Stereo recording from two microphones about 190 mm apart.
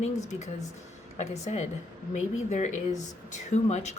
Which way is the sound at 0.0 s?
35° left (ahead or behind).